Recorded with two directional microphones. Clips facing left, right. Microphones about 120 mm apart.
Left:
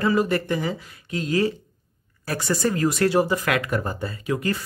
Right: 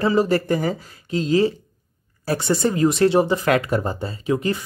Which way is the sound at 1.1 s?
25° right (ahead or behind).